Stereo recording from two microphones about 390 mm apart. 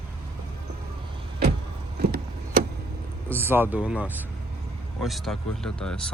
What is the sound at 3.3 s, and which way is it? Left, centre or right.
Speech, centre.